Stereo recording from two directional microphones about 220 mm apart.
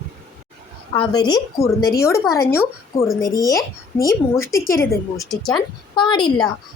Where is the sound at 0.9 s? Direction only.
20° left (ahead or behind).